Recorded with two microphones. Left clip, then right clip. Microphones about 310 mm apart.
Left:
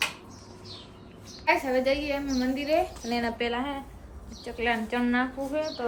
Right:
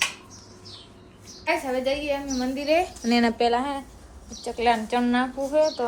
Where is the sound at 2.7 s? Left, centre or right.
Right.